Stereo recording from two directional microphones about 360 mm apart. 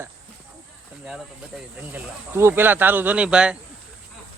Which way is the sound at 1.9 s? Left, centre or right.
Centre.